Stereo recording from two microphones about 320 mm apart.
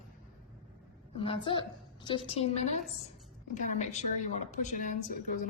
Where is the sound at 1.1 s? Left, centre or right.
Centre.